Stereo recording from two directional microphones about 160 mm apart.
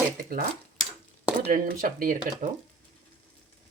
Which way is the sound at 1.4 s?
60° right (ahead or behind).